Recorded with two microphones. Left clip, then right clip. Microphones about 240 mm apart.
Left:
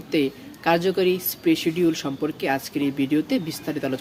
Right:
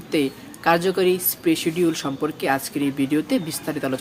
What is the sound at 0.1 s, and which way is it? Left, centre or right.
Speech, centre.